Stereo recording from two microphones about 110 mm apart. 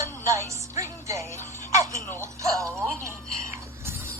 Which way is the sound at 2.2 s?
30° right (ahead or behind).